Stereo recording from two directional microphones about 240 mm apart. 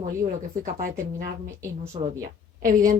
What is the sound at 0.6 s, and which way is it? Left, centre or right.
A woman's voice, right.